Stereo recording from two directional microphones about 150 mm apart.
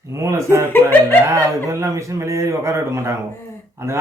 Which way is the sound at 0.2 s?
20° right (ahead or behind).